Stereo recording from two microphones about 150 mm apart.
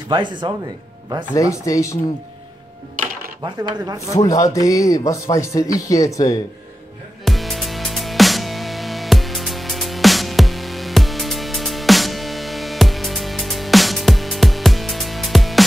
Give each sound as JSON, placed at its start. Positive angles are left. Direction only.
{"t": 0.1, "sound": "speech", "side_deg": -30}
{"t": 1.3, "sound": "speech", "side_deg": 20}
{"t": 3.4, "sound": "speech", "side_deg": -25}
{"t": 4.3, "sound": "speech", "side_deg": 20}
{"t": 7.2, "sound": "music", "side_deg": 0}